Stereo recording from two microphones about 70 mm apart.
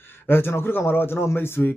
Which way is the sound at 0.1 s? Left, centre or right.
Left.